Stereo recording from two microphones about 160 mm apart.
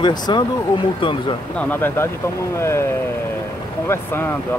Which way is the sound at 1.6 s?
15° left (ahead or behind).